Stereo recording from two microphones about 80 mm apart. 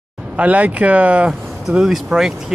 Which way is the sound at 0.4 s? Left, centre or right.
Centre.